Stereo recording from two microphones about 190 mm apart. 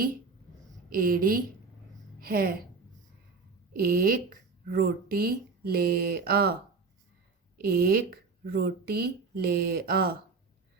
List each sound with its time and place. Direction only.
0.9 s speech: 50° right (ahead or behind)
3.7 s speech: 50° right (ahead or behind)
7.6 s speech: 55° right (ahead or behind)